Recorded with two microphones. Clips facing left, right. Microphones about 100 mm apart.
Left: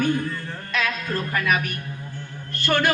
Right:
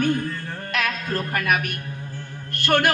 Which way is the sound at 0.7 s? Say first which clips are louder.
Even; 60° right (ahead or behind).